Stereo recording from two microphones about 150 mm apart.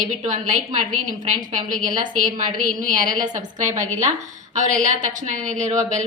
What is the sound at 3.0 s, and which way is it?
A woman's voice, 60° right (ahead or behind).